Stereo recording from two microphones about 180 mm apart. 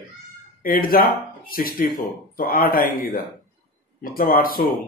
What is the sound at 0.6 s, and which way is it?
Speech, 55° left (ahead or behind).